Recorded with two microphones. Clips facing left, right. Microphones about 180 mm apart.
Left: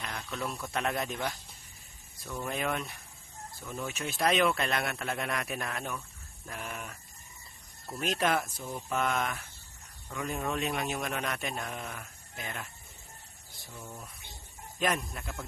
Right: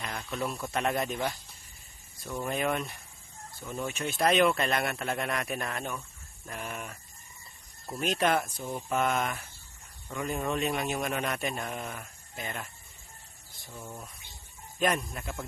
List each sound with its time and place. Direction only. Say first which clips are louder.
0.0 s speech: right 3 dB; centre (ahead or behind)
13.7 s speech: right 2 dB; 20° right (ahead or behind)
14.8 s speech: right 2 dB; centre (ahead or behind)